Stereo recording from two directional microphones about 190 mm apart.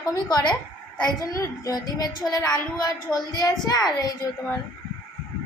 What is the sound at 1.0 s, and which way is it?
A woman's voice, 20° left (ahead or behind).